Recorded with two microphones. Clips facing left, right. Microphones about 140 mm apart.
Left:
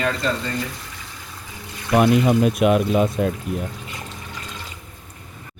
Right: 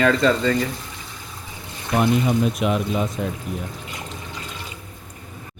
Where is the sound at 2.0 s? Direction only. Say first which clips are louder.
Left 3 dB; 60° left (ahead or behind).